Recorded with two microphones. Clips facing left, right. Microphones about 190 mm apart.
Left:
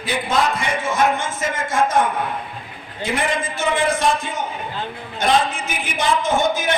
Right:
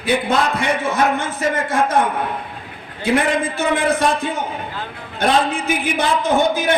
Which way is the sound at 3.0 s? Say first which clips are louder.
Right 5 dB; 60° right (ahead or behind).